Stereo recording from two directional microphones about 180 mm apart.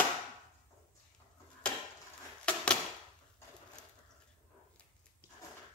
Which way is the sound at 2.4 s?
5° left (ahead or behind).